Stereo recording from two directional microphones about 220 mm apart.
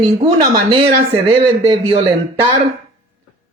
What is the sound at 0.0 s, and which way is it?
Speech, 20° right (ahead or behind).